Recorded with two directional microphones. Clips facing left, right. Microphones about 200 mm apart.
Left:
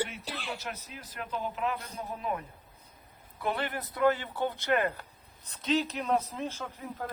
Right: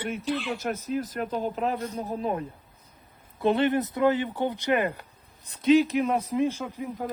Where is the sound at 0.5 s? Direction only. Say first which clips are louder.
Right 13 dB; 45° right (ahead or behind).